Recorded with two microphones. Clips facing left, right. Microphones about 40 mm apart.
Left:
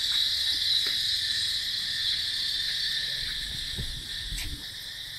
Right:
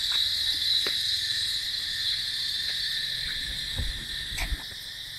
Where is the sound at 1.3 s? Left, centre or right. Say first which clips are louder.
Even; centre.